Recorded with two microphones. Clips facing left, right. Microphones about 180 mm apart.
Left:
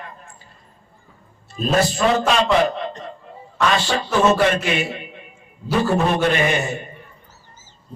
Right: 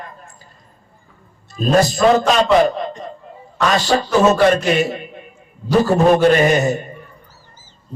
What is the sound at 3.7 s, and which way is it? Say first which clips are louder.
A man's voice: right 7 dB; 40° right (ahead or behind).